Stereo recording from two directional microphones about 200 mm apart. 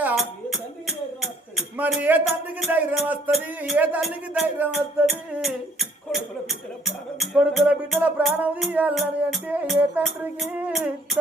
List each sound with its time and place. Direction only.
0.0 s speech: 5° right (ahead or behind)
8.2 s music: centre (ahead or behind)